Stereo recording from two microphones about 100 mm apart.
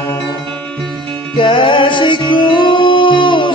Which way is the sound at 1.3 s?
55° left (ahead or behind).